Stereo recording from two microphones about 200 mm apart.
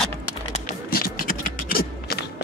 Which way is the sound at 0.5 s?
45° left (ahead or behind).